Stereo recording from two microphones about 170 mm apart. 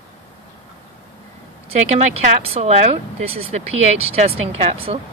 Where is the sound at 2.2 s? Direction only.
40° right (ahead or behind).